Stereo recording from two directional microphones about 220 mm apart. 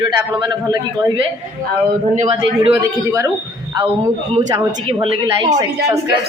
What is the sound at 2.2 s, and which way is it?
A woman's voice, 20° right (ahead or behind).